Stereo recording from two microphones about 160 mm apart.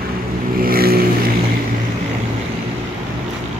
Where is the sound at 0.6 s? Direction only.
70° right (ahead or behind).